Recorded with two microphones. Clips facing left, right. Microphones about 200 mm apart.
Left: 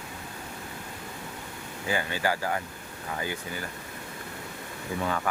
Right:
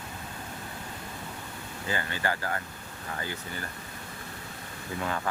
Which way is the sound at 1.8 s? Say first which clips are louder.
Left 3 dB; 10° left (ahead or behind).